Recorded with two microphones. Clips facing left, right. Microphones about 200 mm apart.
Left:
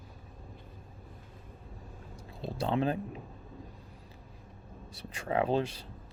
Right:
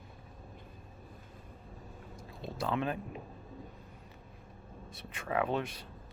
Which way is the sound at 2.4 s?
30° left (ahead or behind).